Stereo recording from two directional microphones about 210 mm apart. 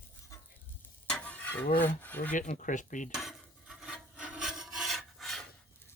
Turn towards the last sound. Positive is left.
turn(degrees=0)  # may be behind; listen again after turning